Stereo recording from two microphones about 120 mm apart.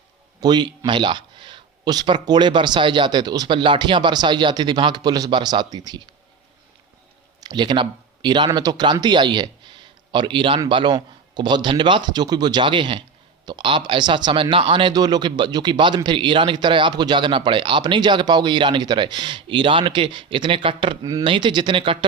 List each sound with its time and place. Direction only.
0.3 s speech: 35° right (ahead or behind)
7.4 s speech: 40° right (ahead or behind)
21.0 s speech: 30° right (ahead or behind)
21.2 s speech: 40° right (ahead or behind)